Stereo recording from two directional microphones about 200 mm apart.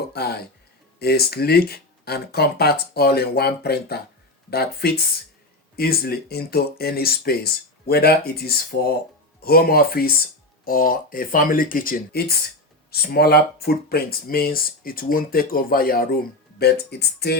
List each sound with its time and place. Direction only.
0.1 s speech: 55° left (ahead or behind)
5.7 s speech: 50° left (ahead or behind)